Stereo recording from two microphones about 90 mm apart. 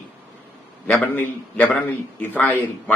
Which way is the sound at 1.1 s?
20° left (ahead or behind).